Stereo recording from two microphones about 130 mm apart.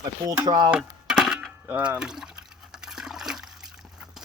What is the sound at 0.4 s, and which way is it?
Speech, 35° right (ahead or behind).